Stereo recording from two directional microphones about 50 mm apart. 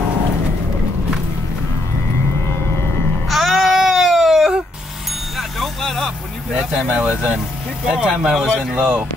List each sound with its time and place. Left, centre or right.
3.3 s a sound: centre
5.6 s vehicle: centre
6.9 s speech: right
7.3 s speech: centre